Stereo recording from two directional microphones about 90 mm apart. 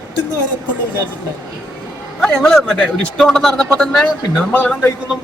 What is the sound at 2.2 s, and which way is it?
A man's voice, 5° left (ahead or behind).